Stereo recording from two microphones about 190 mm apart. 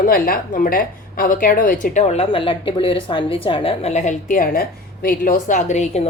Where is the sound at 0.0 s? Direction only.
50° left (ahead or behind).